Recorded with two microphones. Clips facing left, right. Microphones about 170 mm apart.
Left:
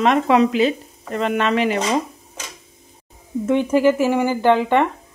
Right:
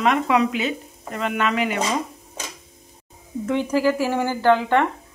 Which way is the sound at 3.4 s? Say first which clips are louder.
Left 4 dB; 20° left (ahead or behind).